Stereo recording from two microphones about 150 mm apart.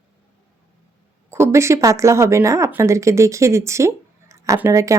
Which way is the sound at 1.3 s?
20° right (ahead or behind).